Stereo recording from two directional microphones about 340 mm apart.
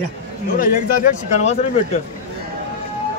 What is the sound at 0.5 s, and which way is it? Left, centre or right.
Speech, left.